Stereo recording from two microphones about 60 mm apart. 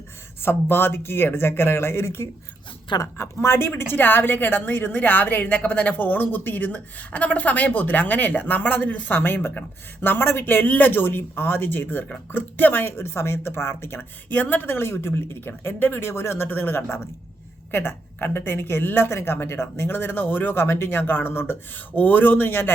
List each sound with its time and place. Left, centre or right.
0.4 s a woman's voice: left